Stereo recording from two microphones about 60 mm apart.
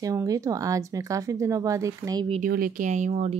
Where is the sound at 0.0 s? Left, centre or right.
Right.